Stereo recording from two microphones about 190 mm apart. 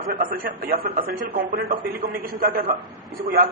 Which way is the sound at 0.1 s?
50° right (ahead or behind).